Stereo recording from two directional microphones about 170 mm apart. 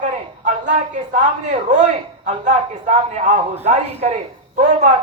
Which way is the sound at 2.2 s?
45° right (ahead or behind).